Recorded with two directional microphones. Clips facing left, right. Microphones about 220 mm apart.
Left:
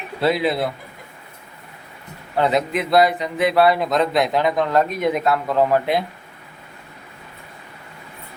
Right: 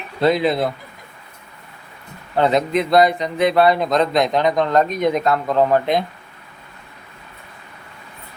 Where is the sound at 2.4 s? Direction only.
5° left (ahead or behind).